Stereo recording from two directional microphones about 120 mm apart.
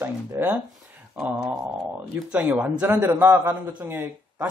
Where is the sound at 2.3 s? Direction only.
15° right (ahead or behind).